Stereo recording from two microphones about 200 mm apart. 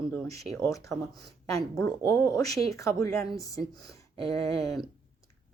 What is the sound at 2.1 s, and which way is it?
A woman's voice, 15° left (ahead or behind).